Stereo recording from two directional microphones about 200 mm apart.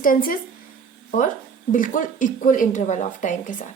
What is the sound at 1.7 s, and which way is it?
Speech, 40° left (ahead or behind).